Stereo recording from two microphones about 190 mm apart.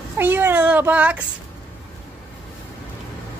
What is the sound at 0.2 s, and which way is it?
Child singing, 10° right (ahead or behind).